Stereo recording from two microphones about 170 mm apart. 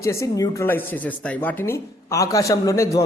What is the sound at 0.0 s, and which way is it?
A man's voice, 15° left (ahead or behind).